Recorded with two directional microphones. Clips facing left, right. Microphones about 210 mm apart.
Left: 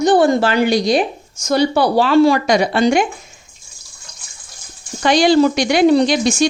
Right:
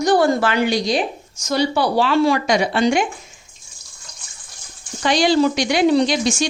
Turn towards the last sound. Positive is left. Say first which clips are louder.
# left 3 dB
turn(degrees=55)  # may be behind; listen again after turning